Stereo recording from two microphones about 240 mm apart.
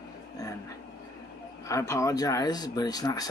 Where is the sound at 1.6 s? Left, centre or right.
Centre.